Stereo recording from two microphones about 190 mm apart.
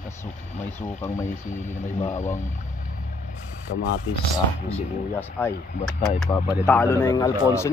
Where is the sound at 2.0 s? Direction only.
15° left (ahead or behind).